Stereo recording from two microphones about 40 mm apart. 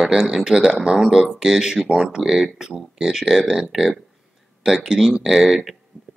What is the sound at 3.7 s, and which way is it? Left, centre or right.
Speech, centre.